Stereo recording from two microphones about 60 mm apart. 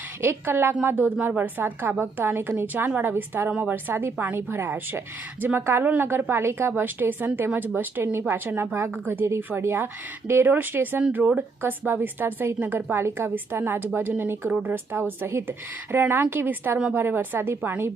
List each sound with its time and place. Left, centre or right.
0.2 s a woman's voice: right
5.8 s a woman's voice: right
13.0 s a woman's voice: right